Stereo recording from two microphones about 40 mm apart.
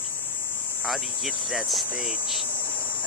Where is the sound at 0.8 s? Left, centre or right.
Centre.